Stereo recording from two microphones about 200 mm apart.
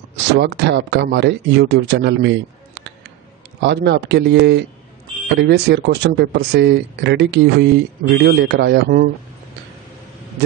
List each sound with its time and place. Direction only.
0.3 s speech: 55° right (ahead or behind)